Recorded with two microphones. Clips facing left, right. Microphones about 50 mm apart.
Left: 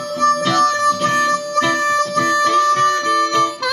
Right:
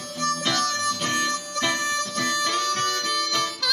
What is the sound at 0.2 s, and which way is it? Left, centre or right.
Harmonica, left.